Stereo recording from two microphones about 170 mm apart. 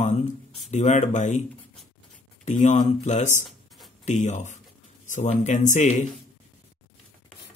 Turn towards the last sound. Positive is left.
turn(degrees=45)  # may be behind; listen again after turning